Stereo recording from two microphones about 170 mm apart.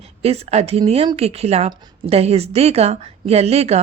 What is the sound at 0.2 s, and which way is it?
Speech, 40° right (ahead or behind).